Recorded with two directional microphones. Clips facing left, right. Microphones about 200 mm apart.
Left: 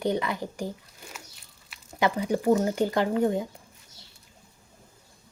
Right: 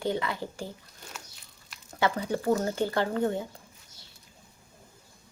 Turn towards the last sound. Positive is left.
turn(degrees=15)  # may be behind; listen again after turning